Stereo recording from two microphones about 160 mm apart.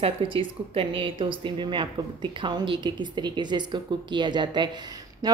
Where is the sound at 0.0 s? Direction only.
35° right (ahead or behind).